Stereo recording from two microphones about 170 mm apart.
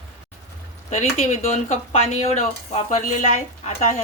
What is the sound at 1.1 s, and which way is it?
Speech, 40° left (ahead or behind).